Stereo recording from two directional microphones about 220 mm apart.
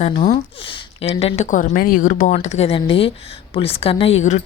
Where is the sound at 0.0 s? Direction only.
30° left (ahead or behind).